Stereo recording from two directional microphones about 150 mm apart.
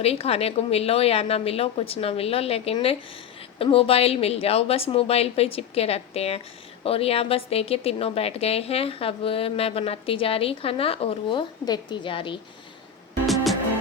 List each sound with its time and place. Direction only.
0.0 s a woman's voice: 40° left (ahead or behind)
13.2 s music: centre (ahead or behind)